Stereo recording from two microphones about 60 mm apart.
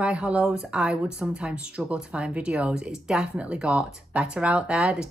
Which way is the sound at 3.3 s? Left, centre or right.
Right.